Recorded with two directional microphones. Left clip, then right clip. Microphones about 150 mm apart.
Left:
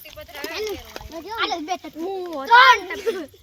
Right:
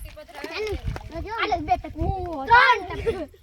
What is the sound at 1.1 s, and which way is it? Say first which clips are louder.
Children playing: even; 25° left (ahead or behind).